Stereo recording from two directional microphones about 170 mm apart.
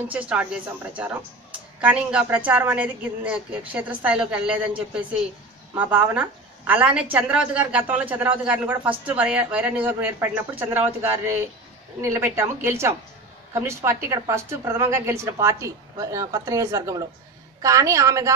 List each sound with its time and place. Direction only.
0.1 s a woman's voice: 10° right (ahead or behind)
1.8 s a woman's voice: 5° right (ahead or behind)